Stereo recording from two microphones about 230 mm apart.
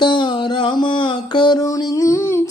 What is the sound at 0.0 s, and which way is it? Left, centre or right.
Music, left.